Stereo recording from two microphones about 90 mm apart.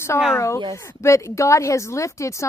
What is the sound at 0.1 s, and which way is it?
Speech, 30° left (ahead or behind).